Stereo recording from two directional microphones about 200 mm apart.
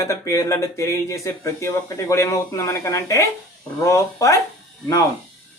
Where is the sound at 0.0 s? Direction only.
15° left (ahead or behind).